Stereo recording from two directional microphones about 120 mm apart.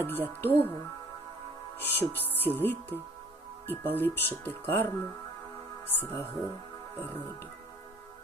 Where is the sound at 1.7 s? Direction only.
15° left (ahead or behind).